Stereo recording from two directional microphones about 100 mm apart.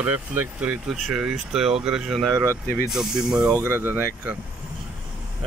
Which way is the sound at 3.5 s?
25° right (ahead or behind).